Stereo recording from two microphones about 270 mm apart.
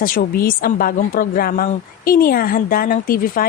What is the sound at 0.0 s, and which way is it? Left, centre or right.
A woman's voice, left.